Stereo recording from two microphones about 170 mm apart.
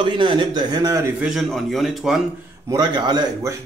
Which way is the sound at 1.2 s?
Centre (ahead or behind).